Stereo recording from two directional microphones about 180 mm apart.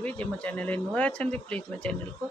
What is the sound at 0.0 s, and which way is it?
Speech, 5° left (ahead or behind).